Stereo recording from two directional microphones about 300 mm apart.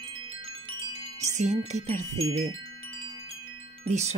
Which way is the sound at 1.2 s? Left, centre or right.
Right.